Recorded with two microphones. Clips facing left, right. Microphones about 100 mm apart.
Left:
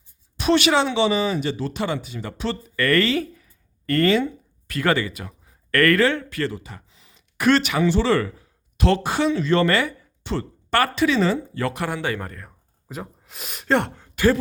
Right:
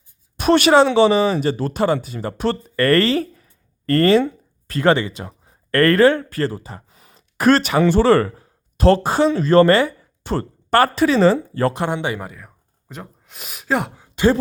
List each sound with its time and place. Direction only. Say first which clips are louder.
0.3 s speech: right 6 dB; 50° right (ahead or behind)
6.8 s a sound: right 5 dB; 50° right (ahead or behind)
7.8 s speech: right 5 dB; 50° right (ahead or behind); by 14.1 s 5° right (ahead or behind)